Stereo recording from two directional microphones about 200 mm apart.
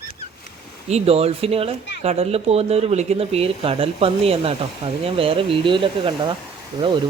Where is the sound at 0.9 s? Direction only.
30° right (ahead or behind).